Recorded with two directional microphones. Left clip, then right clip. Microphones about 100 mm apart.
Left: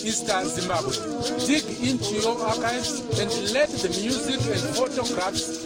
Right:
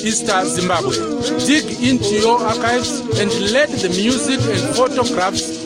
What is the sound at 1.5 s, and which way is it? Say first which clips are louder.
Speech: right 11 dB; 30° right (ahead or behind).